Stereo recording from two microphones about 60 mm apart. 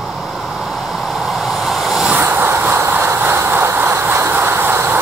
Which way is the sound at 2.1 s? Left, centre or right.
Right.